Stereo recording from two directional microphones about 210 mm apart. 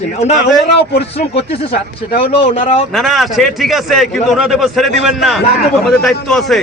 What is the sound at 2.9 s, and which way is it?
A man's voice, centre (ahead or behind).